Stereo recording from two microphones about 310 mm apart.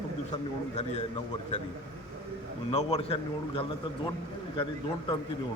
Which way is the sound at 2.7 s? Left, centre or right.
Centre.